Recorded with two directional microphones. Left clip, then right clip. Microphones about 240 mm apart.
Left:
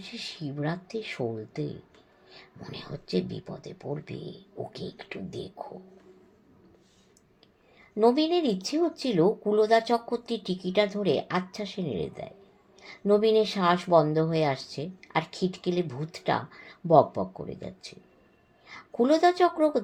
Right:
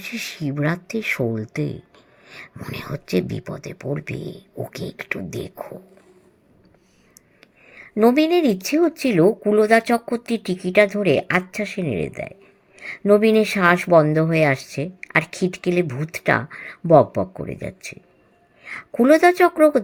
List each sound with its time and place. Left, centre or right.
0.1 s speech: right
8.0 s speech: right
19.2 s speech: right